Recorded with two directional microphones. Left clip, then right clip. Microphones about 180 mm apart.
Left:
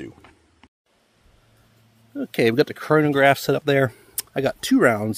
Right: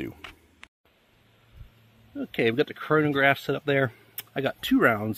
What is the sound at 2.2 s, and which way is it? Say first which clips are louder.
Speech: left 5 dB; 70° left (ahead or behind).